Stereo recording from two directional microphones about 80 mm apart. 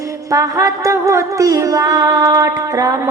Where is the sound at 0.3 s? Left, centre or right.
Right.